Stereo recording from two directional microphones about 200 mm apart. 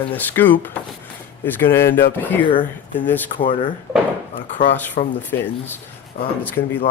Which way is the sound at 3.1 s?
10° left (ahead or behind).